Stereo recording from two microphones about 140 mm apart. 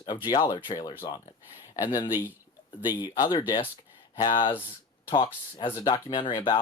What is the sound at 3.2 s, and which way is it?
Speech, 25° left (ahead or behind).